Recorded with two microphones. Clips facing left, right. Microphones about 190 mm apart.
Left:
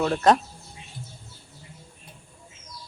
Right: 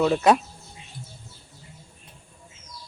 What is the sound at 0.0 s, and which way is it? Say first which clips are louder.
Speech: right 1 dB; 5° right (ahead or behind).